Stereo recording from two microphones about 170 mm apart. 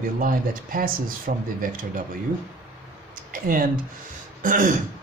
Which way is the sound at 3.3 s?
55° right (ahead or behind).